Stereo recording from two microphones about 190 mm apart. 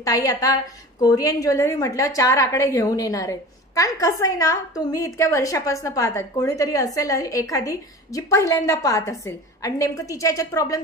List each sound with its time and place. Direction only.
0.0 s a woman's voice: 20° left (ahead or behind)